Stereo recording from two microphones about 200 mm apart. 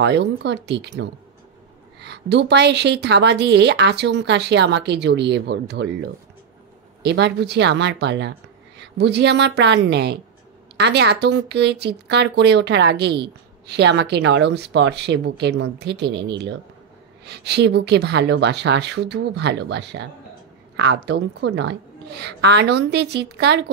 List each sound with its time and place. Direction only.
0.0 s a woman's voice: 60° right (ahead or behind)